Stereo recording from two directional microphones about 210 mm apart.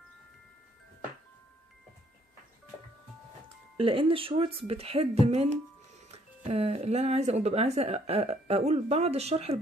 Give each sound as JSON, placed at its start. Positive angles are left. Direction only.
{"t": 3.7, "sound": "speech", "side_deg": -25}